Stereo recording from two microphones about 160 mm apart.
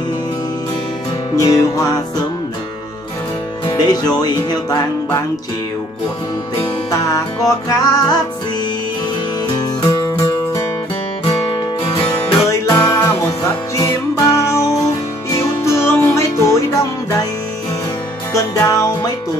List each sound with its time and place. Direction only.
1.3 s music: 20° left (ahead or behind)
3.6 s music: 25° left (ahead or behind)
6.9 s music: 20° left (ahead or behind)
9.8 s music: 25° left (ahead or behind)
11.8 s music: 35° left (ahead or behind)
12.4 s music: 20° left (ahead or behind)
18.3 s music: 20° left (ahead or behind)